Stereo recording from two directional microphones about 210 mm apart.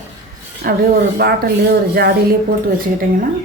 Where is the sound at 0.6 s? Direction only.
45° right (ahead or behind).